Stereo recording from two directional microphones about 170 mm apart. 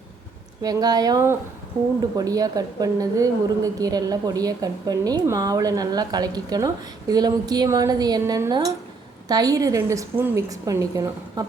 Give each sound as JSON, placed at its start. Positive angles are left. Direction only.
{"t": 0.6, "sound": "a woman's voice", "side_deg": -20}